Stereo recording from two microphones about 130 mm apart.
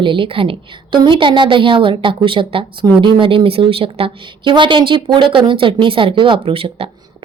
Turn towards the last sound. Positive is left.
turn(degrees=-45)  # may be behind; listen again after turning